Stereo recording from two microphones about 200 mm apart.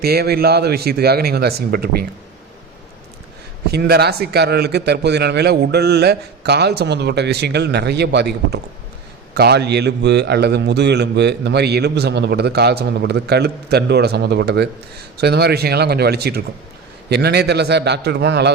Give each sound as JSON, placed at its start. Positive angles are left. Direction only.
{"t": 0.0, "sound": "speech", "side_deg": -50}
{"t": 3.7, "sound": "a man's voice", "side_deg": -55}